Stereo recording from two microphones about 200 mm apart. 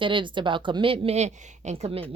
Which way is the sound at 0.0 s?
25° right (ahead or behind).